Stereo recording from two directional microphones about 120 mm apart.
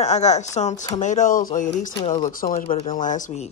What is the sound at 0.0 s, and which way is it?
Speech, 70° left (ahead or behind).